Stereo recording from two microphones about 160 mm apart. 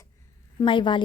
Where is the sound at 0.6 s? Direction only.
30° left (ahead or behind).